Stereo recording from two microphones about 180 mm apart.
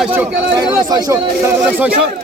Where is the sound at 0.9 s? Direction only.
15° right (ahead or behind).